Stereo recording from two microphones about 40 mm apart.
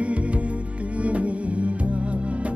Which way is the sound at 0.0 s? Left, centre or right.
Right.